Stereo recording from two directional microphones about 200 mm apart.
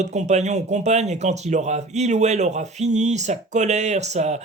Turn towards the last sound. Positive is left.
turn(degrees=-35)  # may be behind; listen again after turning